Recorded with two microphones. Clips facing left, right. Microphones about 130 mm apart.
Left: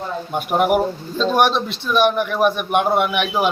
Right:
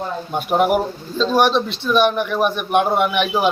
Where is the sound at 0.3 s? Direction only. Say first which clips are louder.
Even; 5° left (ahead or behind).